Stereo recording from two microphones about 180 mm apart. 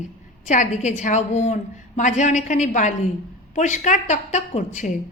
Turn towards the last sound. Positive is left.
turn(degrees=40)  # may be behind; listen again after turning